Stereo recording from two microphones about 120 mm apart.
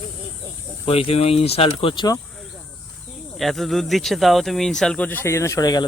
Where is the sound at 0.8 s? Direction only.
50° left (ahead or behind).